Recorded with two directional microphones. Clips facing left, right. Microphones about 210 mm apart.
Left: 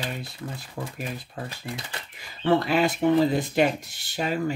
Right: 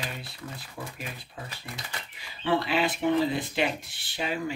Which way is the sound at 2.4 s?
45° left (ahead or behind).